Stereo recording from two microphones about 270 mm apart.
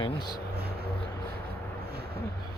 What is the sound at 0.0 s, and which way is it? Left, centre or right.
Speech, centre.